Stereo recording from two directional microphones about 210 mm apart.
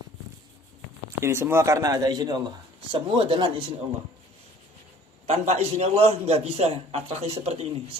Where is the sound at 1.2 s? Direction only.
10° right (ahead or behind).